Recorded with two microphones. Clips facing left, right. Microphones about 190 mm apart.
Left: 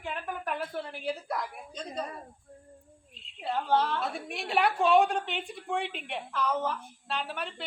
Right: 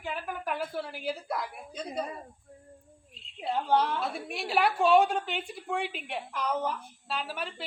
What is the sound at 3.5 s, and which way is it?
Speech, 15° right (ahead or behind).